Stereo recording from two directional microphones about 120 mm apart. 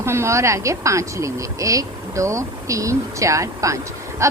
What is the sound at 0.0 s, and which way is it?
A woman's voice, 20° right (ahead or behind).